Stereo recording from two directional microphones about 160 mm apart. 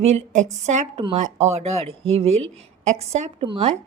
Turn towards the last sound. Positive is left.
turn(degrees=-35)  # may be behind; listen again after turning